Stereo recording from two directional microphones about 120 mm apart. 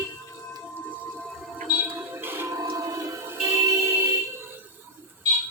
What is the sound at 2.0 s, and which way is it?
Music, 20° right (ahead or behind).